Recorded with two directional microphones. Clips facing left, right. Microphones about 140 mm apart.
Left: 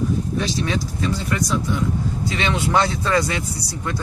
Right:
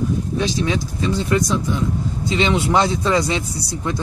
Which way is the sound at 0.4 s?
20° right (ahead or behind).